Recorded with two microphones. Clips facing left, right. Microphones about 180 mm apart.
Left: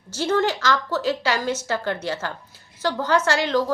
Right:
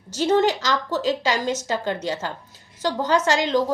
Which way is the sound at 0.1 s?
20° right (ahead or behind).